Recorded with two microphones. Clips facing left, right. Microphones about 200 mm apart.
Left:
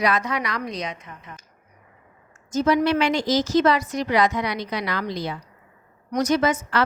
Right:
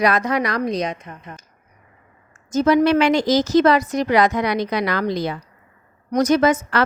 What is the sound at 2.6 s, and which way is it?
Speech, 90° right.